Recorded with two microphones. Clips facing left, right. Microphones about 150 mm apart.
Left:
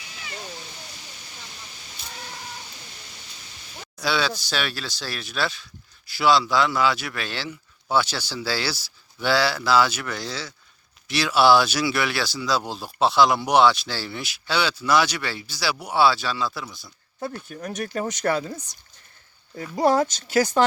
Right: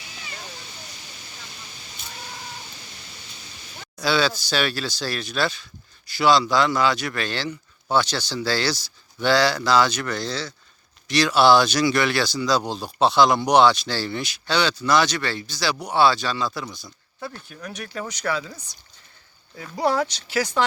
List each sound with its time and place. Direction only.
4.0 s speech: centre (ahead or behind)
17.5 s speech: 45° left (ahead or behind)
19.8 s speech: 45° left (ahead or behind)